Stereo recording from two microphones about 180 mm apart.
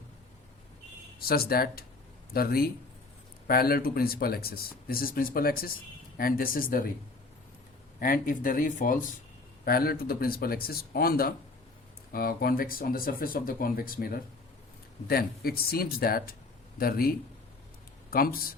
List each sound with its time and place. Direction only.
1.2 s speech: 55° left (ahead or behind)
7.9 s speech: 50° left (ahead or behind)